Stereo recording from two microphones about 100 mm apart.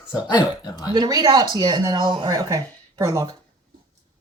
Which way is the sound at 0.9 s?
40° right (ahead or behind).